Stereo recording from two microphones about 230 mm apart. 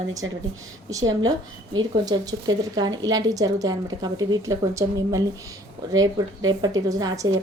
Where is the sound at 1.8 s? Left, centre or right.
Centre.